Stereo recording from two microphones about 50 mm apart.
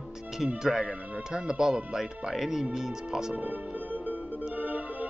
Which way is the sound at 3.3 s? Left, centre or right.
Right.